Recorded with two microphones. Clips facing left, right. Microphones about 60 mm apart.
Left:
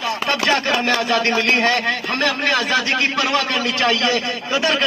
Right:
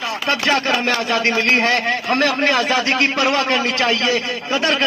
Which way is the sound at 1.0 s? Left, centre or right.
Right.